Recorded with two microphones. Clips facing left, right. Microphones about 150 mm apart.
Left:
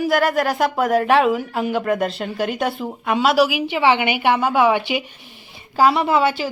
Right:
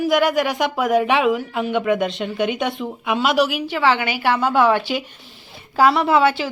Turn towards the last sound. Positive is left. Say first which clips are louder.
# right 1 dB
turn(degrees=10)  # may be behind; listen again after turning